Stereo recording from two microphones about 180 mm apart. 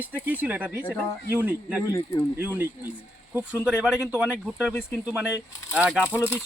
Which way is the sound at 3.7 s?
5° right (ahead or behind).